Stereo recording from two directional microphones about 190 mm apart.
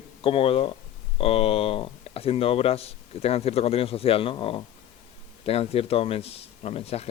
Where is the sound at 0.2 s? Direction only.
30° left (ahead or behind).